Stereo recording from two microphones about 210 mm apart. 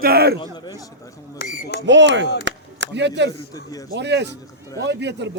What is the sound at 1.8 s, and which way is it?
A man's voice, 60° right (ahead or behind).